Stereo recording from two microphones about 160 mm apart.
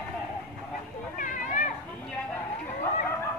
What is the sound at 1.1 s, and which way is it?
Children playing, 50° left (ahead or behind).